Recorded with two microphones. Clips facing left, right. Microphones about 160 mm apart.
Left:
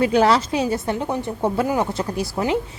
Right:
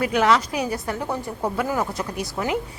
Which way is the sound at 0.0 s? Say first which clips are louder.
Left 3 dB; 30° left (ahead or behind).